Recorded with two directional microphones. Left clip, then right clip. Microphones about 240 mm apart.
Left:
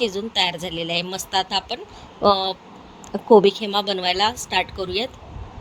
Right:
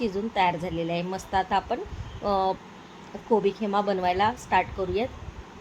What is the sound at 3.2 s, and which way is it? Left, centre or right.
A woman's voice, left.